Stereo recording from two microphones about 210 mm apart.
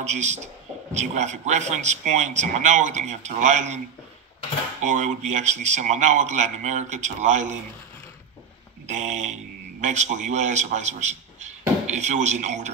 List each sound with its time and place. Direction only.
0.0 s a man's voice: 35° right (ahead or behind)
4.9 s a man's voice: 35° right (ahead or behind)
8.8 s a man's voice: 35° right (ahead or behind)